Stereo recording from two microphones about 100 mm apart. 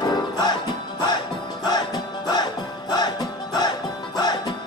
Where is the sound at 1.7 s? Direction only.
45° left (ahead or behind).